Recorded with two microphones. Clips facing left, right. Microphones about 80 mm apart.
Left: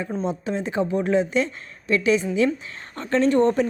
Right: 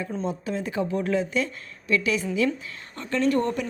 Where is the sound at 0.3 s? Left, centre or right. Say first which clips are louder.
Left 3 dB; left.